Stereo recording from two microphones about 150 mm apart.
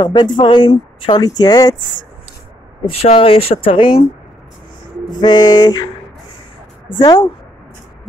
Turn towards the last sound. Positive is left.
turn(degrees=25)  # may be behind; listen again after turning